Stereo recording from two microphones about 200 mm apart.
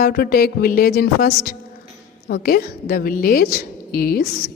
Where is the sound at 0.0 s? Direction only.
50° left (ahead or behind).